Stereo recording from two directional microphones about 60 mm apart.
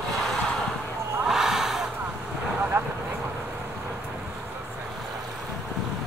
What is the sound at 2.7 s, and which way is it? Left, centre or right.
Vehicle, right.